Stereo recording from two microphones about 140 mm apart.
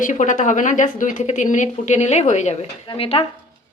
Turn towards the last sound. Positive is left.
turn(degrees=45)  # may be behind; listen again after turning